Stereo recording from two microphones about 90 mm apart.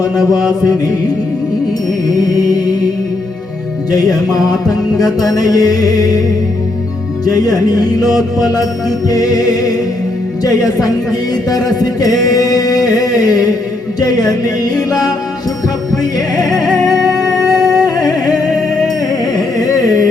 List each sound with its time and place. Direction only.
3.9 s music: 45° left (ahead or behind)
7.3 s music: 45° left (ahead or behind)
16.9 s music: centre (ahead or behind)
17.8 s music: 45° left (ahead or behind)
19.6 s carnatic music: 40° left (ahead or behind)